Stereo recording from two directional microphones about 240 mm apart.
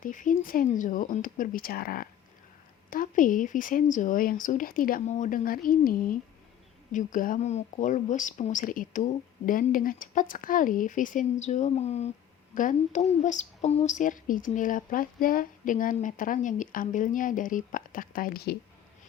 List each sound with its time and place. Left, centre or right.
0.0 s a woman's voice: left